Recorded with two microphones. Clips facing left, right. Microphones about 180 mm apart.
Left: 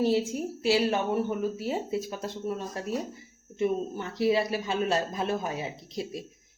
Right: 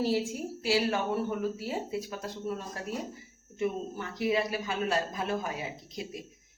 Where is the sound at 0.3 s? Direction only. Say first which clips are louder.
Left 4 dB; 20° left (ahead or behind).